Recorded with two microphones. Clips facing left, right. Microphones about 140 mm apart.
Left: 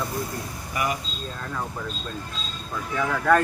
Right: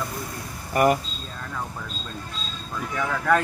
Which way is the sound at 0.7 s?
50° right (ahead or behind).